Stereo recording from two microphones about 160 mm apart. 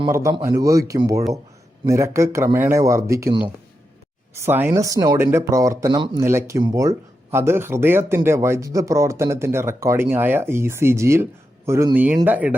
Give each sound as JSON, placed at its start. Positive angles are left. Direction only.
{"t": 0.1, "sound": "speech", "side_deg": -20}
{"t": 4.4, "sound": "speech", "side_deg": -15}